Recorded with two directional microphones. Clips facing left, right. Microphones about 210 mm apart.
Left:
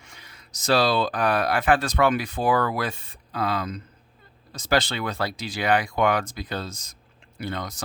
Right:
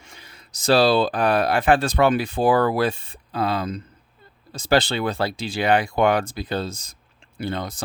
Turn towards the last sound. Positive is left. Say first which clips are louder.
# right 4 dB
turn(degrees=-30)  # may be behind; listen again after turning